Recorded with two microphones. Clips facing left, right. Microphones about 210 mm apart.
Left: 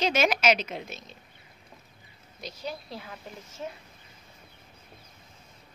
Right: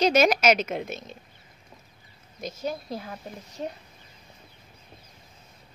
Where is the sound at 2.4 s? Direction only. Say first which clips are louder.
Right 6 dB; 45° right (ahead or behind).